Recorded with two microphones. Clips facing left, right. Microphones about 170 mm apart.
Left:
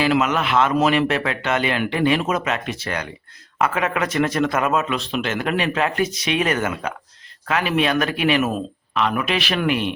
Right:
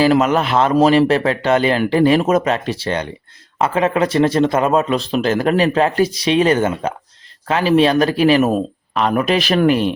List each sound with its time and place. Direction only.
0.0 s speech: 40° right (ahead or behind)